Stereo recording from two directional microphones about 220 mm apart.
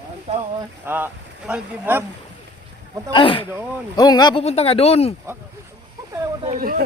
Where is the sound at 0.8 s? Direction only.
10° right (ahead or behind).